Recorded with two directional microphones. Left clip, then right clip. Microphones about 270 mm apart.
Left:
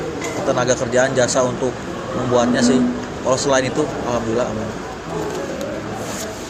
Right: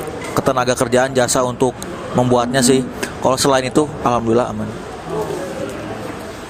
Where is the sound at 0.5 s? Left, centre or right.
Right.